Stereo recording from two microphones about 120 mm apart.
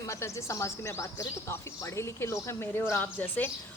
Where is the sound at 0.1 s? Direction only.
25° left (ahead or behind).